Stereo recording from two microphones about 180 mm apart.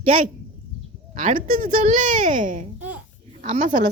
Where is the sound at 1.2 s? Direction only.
45° right (ahead or behind).